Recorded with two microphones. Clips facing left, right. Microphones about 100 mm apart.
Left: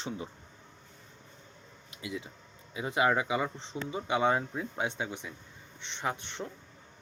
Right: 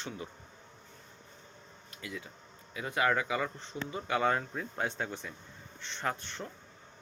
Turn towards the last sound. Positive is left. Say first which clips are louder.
# left 1 dB
turn(degrees=15)  # may be behind; listen again after turning